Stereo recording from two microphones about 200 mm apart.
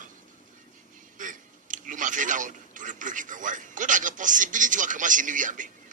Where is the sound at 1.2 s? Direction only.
40° right (ahead or behind).